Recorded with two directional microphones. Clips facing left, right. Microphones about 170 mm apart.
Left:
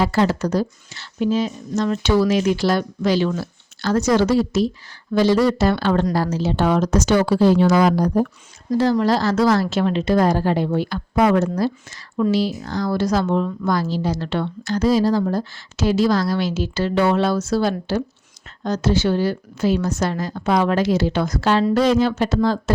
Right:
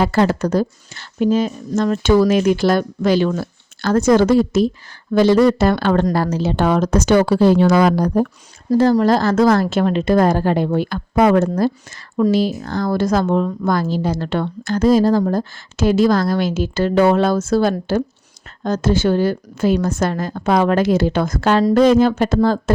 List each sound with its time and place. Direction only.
0.0 s speech: 55° right (ahead or behind)
8.7 s speech: 40° right (ahead or behind)